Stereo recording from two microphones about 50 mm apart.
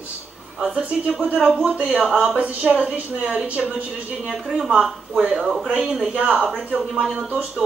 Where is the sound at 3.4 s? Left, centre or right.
Right.